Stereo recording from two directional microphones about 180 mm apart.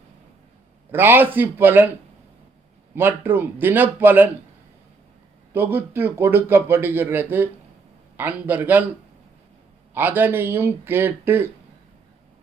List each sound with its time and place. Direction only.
0.9 s speech: 10° right (ahead or behind)
2.9 s speech: 10° right (ahead or behind)
5.5 s speech: 10° right (ahead or behind)
9.9 s speech: 10° right (ahead or behind)